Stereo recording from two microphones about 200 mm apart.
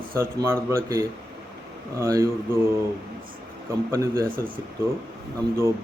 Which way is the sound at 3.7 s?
15° right (ahead or behind).